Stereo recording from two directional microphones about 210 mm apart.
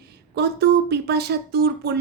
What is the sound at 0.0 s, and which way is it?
Speech, 50° right (ahead or behind).